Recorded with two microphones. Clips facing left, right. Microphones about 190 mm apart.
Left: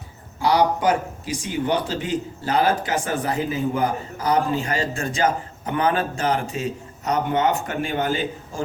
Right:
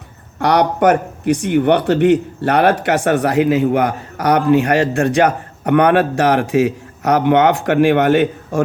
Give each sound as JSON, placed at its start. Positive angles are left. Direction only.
{"t": 0.3, "sound": "speech", "side_deg": -65}